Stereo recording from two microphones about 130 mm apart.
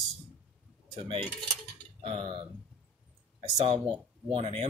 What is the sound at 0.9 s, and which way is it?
Speech, 40° right (ahead or behind).